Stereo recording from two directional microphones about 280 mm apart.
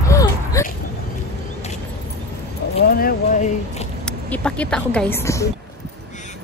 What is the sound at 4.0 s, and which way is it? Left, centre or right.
Speech, centre.